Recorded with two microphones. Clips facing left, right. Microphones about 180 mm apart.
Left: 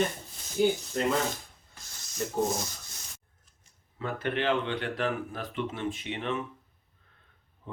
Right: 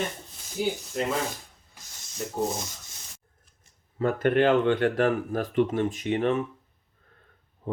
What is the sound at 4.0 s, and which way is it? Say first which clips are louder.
Speech: right 9 dB; 45° right (ahead or behind).